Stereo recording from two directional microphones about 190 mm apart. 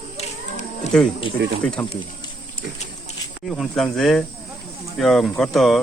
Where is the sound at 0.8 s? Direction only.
35° left (ahead or behind).